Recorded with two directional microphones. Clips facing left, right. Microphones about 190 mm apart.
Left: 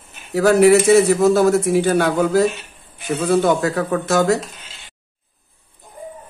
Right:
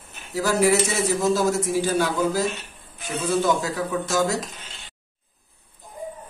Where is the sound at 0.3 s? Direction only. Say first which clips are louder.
Left 8 dB; 60° left (ahead or behind).